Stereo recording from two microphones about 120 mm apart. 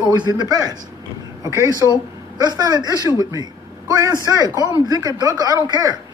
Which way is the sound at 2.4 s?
35° right (ahead or behind).